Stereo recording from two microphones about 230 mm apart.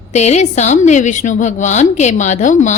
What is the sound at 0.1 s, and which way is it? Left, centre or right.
A woman's voice, left.